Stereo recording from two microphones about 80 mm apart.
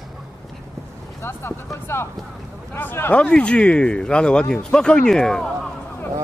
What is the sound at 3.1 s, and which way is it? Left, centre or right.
Speech, centre.